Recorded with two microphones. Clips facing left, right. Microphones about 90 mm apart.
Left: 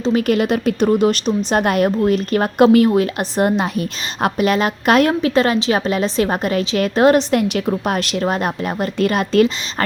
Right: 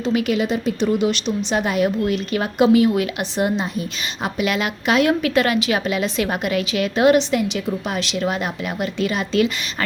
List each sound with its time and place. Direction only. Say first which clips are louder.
0.0 s a woman's voice: left 3 dB; 40° left (ahead or behind); by 4.3 s 60° left (ahead or behind)
4.4 s a woman's voice: left 4 dB; 40° left (ahead or behind)
5.2 s a woman's voice: left 3 dB; 30° left (ahead or behind)